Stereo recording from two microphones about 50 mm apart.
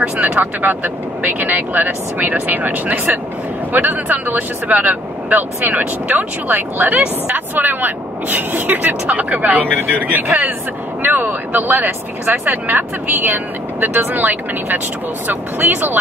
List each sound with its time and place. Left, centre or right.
0.2 s speech: right